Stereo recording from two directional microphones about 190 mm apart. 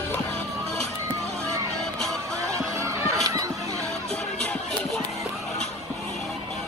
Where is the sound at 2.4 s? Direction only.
15° right (ahead or behind).